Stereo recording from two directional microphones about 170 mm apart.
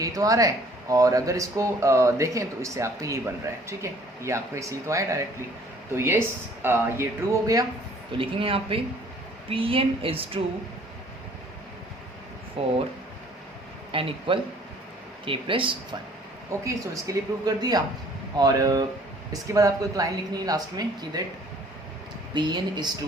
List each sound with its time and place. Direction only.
0.0 s speech: 20° right (ahead or behind)
8.2 s a woman's voice: 30° right (ahead or behind)
12.6 s a woman's voice: 35° right (ahead or behind)
13.9 s a woman's voice: 30° right (ahead or behind)
16.5 s speech: 20° right (ahead or behind)
22.4 s speech: 25° right (ahead or behind)